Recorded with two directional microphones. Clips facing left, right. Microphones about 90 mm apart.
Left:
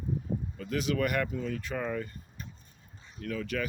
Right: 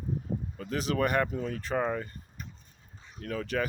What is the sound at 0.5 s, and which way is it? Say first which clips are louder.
Speech: right 1 dB; 35° right (ahead or behind).